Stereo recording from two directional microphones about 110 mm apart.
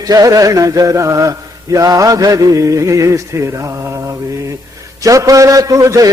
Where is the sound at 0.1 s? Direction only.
35° right (ahead or behind).